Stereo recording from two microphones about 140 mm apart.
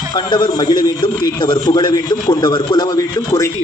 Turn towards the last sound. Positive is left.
turn(degrees=20)  # may be behind; listen again after turning